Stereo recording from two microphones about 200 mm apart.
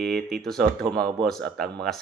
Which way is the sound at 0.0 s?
Centre (ahead or behind).